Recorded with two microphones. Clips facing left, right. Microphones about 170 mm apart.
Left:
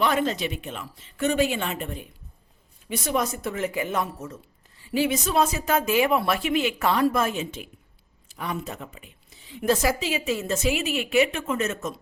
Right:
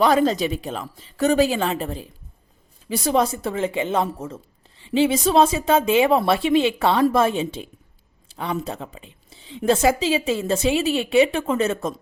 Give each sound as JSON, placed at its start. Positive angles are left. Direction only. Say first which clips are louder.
{"t": 0.0, "sound": "a woman's voice", "louder": "right 6 dB", "side_deg": -35}